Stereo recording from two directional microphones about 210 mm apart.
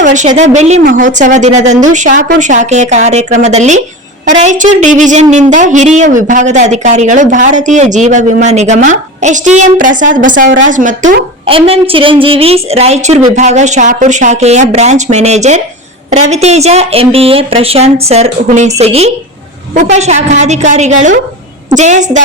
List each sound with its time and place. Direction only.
0.0 s speech: 35° right (ahead or behind)